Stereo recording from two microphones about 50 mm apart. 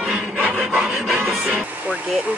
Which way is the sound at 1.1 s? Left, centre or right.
Right.